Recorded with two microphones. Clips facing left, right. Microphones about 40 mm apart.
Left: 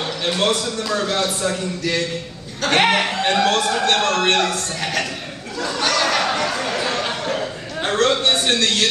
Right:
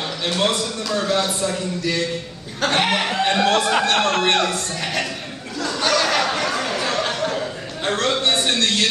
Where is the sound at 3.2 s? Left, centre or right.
Centre.